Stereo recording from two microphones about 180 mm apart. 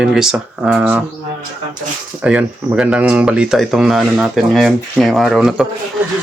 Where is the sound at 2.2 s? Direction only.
5° right (ahead or behind).